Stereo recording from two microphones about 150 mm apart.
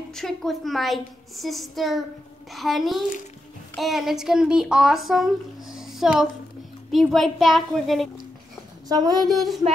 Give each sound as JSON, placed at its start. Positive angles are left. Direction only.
{"t": 0.1, "sound": "speech", "side_deg": 0}
{"t": 8.8, "sound": "speech", "side_deg": -25}
{"t": 9.2, "sound": "speech", "side_deg": 0}